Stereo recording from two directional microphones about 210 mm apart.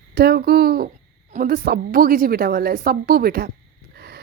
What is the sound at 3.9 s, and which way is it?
Wheeze, 50° right (ahead or behind).